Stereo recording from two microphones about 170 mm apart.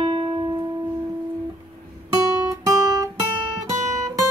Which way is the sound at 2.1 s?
20° right (ahead or behind).